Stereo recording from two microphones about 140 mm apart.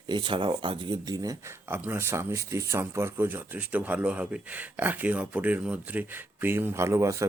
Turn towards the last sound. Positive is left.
turn(degrees=-20)  # may be behind; listen again after turning